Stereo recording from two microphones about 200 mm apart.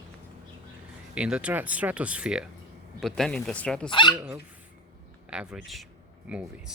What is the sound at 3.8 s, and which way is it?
Speech, 25° left (ahead or behind).